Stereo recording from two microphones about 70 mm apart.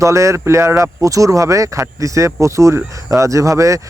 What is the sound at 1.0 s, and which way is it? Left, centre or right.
Speech, right.